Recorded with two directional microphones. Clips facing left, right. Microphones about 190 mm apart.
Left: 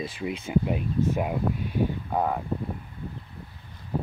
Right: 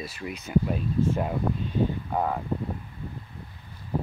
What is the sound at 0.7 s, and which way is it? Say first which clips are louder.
Speech: even; 10° left (ahead or behind).